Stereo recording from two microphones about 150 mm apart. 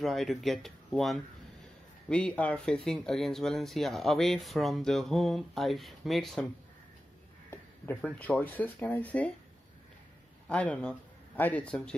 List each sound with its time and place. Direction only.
0.0 s speech: centre (ahead or behind)
7.5 s speech: 15° left (ahead or behind)
10.5 s speech: 10° left (ahead or behind)